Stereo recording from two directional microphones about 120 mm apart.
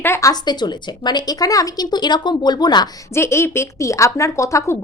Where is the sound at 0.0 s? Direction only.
25° left (ahead or behind).